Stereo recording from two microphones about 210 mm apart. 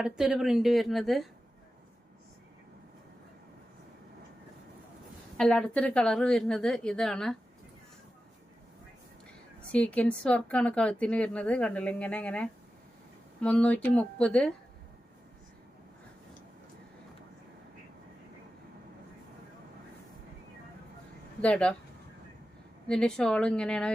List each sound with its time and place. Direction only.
0.0 s a woman's voice: 5° right (ahead or behind)
5.4 s a woman's voice: 5° left (ahead or behind)
9.7 s a woman's voice: 5° left (ahead or behind)
21.4 s a woman's voice: 5° left (ahead or behind)
22.9 s a woman's voice: 5° left (ahead or behind)